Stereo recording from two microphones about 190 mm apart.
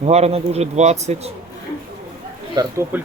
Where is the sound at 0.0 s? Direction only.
35° right (ahead or behind).